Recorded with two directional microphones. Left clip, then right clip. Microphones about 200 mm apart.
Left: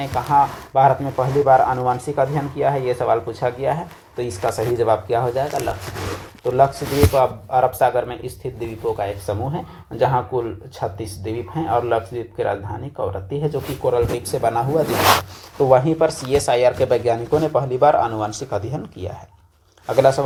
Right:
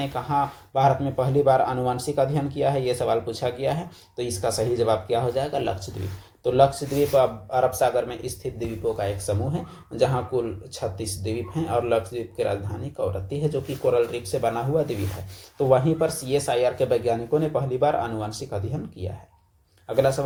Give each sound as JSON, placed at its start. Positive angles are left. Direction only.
{"t": 0.0, "sound": "speech", "side_deg": 10}